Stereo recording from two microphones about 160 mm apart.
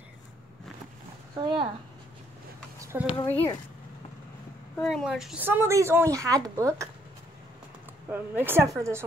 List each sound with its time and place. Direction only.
1.3 s speech: 30° right (ahead or behind)
2.8 s a sound: 15° right (ahead or behind)
3.3 s speech: 10° left (ahead or behind)
4.7 s speech: centre (ahead or behind); by 6.9 s 20° right (ahead or behind)
8.1 s speech: 15° right (ahead or behind)